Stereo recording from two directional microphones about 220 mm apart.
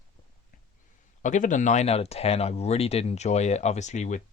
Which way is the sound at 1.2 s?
35° left (ahead or behind).